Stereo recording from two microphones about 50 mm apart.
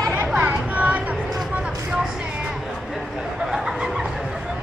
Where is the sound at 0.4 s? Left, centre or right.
Right.